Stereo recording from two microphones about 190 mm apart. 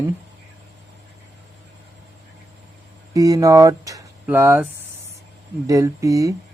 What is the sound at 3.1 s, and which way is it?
Speech, 20° right (ahead or behind).